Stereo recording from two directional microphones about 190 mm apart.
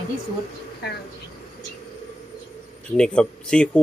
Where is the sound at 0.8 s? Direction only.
60° left (ahead or behind).